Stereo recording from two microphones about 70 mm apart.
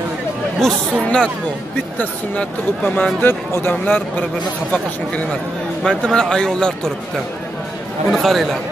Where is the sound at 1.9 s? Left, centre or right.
Left.